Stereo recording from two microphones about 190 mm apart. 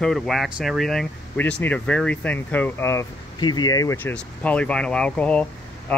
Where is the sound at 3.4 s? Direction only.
20° left (ahead or behind).